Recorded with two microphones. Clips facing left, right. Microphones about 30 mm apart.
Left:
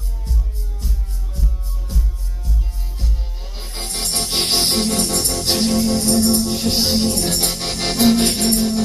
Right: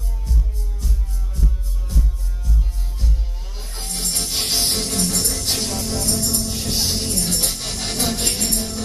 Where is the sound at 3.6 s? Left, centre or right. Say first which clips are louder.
Left 3 dB; left.